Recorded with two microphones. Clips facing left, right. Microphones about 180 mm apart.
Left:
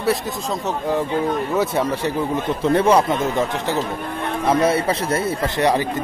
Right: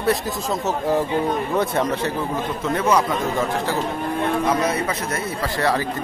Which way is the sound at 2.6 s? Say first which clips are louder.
Left 4 dB; 30° left (ahead or behind).